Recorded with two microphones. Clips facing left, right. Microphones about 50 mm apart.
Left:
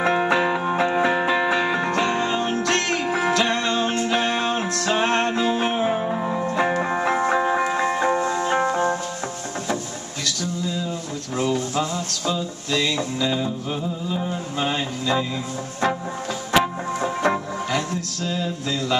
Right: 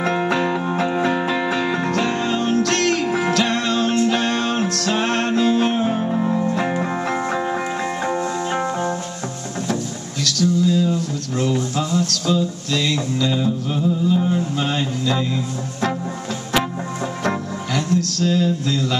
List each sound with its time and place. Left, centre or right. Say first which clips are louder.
0.0 s music: even; centre
10.2 s a sound: right 9 dB; centre
11.7 s music: right 4 dB; centre
17.0 s music: left 2 dB; centre